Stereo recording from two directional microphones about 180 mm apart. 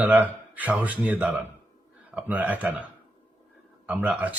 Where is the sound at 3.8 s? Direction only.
10° right (ahead or behind).